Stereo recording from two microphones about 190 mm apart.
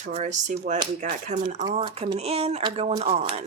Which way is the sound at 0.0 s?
40° right (ahead or behind).